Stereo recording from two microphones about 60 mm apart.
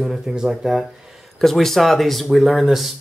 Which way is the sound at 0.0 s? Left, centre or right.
Centre.